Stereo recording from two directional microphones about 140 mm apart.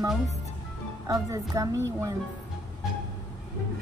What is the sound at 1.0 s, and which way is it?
A woman's voice, 25° right (ahead or behind).